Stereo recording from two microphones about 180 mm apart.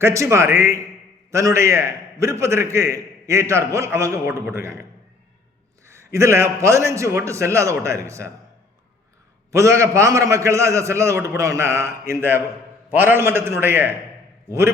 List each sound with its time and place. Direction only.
0.0 s a man's voice: 15° right (ahead or behind)
5.9 s a man's voice: 15° right (ahead or behind)
9.5 s a man's voice: 15° right (ahead or behind)